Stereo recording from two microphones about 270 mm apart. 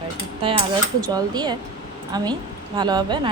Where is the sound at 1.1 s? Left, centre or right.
Centre.